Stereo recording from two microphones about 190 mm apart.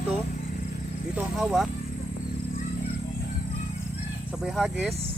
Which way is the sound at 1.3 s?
Centre (ahead or behind).